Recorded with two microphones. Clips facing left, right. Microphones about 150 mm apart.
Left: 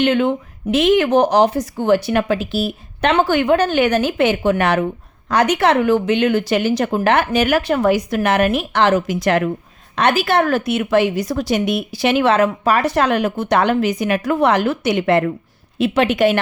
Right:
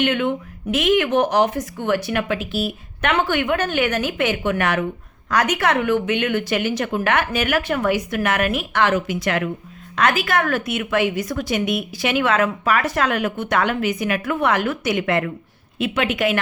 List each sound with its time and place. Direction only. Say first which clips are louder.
0.0 s speech: left 4 dB; 35° left (ahead or behind)
9.9 s speech: left 4 dB; 30° left (ahead or behind)